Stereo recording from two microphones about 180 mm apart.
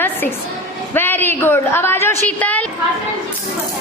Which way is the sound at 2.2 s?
10° left (ahead or behind).